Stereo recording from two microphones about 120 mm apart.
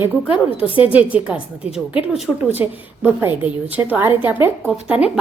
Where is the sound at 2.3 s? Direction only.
10° left (ahead or behind).